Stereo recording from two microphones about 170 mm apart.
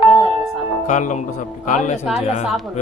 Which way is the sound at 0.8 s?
45° left (ahead or behind).